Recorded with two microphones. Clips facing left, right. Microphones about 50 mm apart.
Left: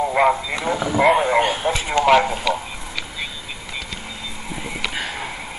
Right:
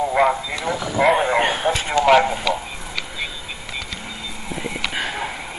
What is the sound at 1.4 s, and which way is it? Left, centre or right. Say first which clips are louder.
Speech: even; centre.